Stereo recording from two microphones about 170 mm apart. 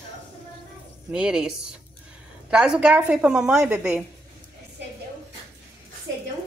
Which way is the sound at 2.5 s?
5° right (ahead or behind).